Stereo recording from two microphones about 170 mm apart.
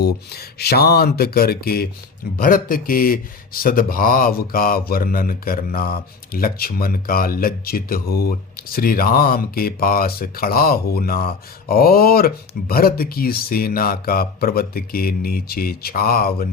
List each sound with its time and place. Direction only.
0.0 s speech: 70° left (ahead or behind)